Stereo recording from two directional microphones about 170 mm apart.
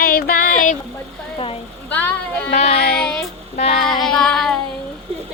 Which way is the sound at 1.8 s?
10° left (ahead or behind).